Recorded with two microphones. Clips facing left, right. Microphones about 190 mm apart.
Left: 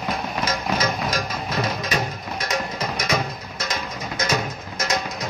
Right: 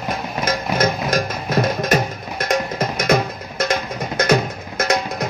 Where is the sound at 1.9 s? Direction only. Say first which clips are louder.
Right 6 dB; 50° right (ahead or behind).